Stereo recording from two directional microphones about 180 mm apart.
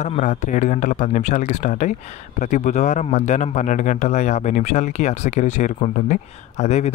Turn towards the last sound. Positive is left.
turn(degrees=40)  # may be behind; listen again after turning